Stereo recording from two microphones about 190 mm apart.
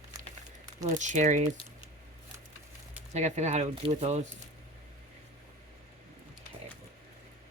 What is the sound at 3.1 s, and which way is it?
Speech, 35° right (ahead or behind).